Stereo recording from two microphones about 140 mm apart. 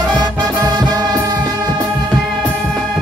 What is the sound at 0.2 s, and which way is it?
Music, 30° right (ahead or behind).